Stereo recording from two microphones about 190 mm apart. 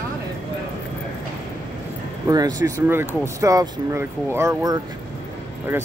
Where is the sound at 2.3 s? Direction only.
20° right (ahead or behind).